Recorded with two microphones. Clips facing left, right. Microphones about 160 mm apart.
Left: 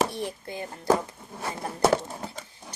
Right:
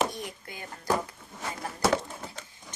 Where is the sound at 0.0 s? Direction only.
30° left (ahead or behind).